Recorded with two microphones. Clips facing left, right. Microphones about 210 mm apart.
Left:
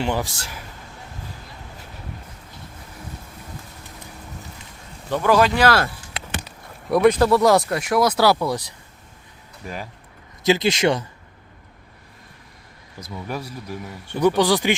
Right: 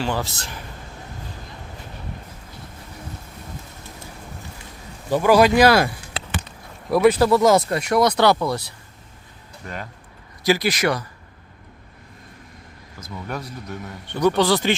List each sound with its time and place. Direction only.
0.0 s speech: 15° left (ahead or behind)
5.0 s speech: 10° right (ahead or behind)
6.9 s speech: 5° right (ahead or behind); by 8.6 s 10° left (ahead or behind)
9.6 s speech: 5° left (ahead or behind)
10.4 s speech: 25° left (ahead or behind)
13.1 s speech: 5° left (ahead or behind)